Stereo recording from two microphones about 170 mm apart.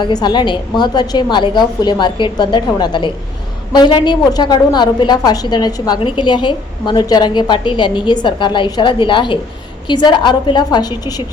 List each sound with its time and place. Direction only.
0.0 s a woman's voice: 25° left (ahead or behind)